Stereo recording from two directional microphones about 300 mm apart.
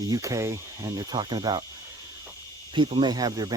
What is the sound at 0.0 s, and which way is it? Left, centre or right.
Speech, centre.